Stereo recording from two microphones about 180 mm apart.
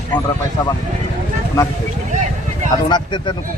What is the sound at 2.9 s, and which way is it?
Speech, 25° left (ahead or behind).